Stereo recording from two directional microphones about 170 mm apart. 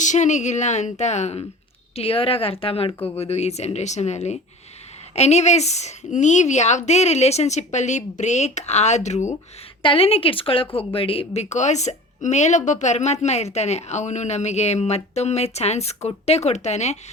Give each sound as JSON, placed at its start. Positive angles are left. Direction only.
{"t": 0.0, "sound": "a woman's voice", "side_deg": 45}